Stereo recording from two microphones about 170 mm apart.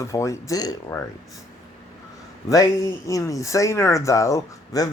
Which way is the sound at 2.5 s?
20° left (ahead or behind).